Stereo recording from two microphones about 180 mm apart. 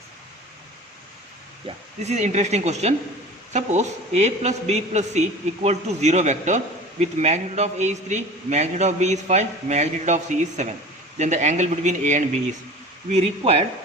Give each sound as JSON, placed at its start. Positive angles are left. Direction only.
{"t": 1.6, "sound": "a man's voice", "side_deg": -40}